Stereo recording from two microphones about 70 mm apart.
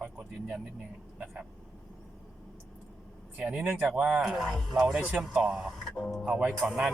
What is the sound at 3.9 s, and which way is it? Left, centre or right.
Speech, right.